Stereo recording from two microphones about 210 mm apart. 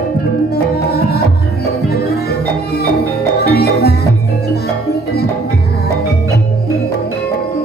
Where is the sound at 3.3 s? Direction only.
50° left (ahead or behind).